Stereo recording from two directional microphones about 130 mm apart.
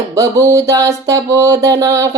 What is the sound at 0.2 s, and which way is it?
Speech, 25° right (ahead or behind).